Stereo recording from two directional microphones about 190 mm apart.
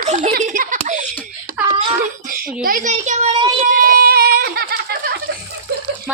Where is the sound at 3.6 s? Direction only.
50° right (ahead or behind).